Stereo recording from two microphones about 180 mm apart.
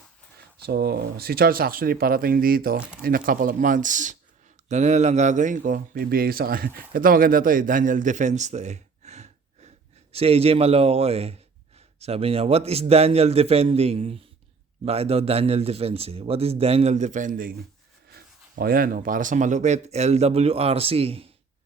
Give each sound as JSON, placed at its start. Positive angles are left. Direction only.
{"t": 0.6, "sound": "a man's voice", "side_deg": -60}